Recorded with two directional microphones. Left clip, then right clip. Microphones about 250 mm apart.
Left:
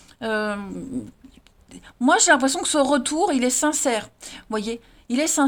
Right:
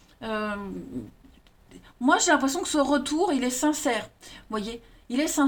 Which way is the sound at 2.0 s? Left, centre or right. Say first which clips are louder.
Left 4 dB; left.